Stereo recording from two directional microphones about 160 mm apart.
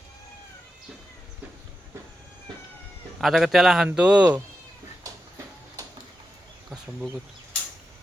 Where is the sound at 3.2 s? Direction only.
Centre (ahead or behind).